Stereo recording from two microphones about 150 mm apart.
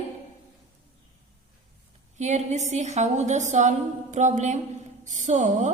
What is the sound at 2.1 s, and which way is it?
A woman's voice, 50° right (ahead or behind).